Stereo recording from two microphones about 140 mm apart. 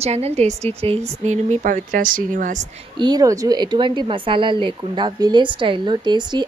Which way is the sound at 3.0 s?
30° right (ahead or behind).